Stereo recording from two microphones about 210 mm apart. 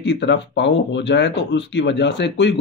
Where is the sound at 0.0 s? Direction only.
55° left (ahead or behind).